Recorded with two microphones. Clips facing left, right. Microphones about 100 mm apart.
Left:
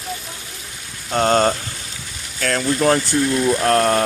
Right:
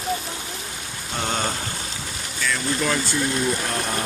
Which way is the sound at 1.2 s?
60° left (ahead or behind).